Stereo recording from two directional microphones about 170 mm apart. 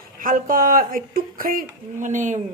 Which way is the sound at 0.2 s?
55° right (ahead or behind).